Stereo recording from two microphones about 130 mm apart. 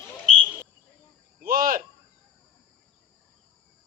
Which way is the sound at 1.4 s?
90° right.